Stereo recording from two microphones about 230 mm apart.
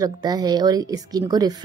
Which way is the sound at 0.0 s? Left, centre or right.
Centre.